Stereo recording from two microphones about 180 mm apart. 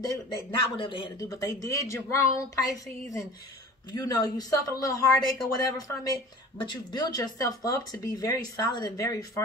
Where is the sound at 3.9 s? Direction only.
20° left (ahead or behind).